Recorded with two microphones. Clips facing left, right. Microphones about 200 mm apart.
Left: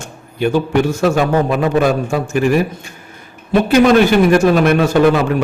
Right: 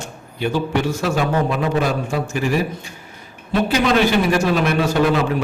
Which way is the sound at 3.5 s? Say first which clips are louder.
Left 7 dB; 50° left (ahead or behind).